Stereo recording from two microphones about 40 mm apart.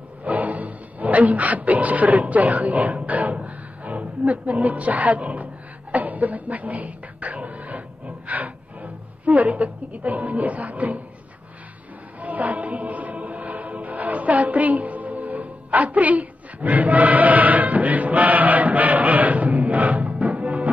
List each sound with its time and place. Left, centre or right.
0.2 s a sound: right
8.3 s music: right
9.2 s a woman's voice: right
12.2 s music: right